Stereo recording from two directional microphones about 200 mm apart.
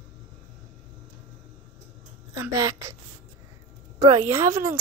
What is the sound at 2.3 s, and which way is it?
Speech, 15° right (ahead or behind).